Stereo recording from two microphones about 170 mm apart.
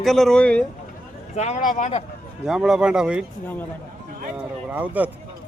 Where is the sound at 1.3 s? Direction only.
40° left (ahead or behind).